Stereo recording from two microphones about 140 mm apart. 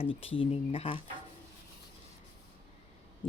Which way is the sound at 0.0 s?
40° left (ahead or behind).